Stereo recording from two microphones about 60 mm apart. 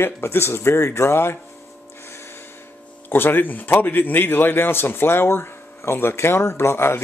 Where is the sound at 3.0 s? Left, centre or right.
Left.